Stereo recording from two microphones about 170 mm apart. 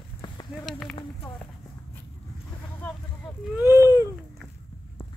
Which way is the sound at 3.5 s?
15° right (ahead or behind).